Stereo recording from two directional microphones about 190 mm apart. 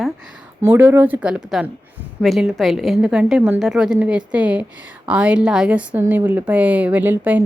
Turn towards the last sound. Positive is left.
turn(degrees=-10)  # may be behind; listen again after turning